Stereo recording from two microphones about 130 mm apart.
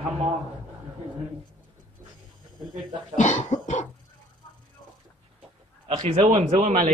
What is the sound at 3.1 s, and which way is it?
Cough, 65° left (ahead or behind).